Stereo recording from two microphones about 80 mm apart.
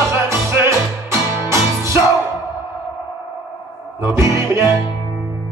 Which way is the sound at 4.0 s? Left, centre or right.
Right.